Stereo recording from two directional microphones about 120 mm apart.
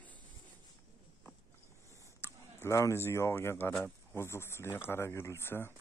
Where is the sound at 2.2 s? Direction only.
25° left (ahead or behind).